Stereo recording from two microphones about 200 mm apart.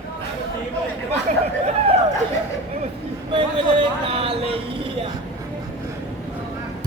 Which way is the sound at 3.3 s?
25° right (ahead or behind).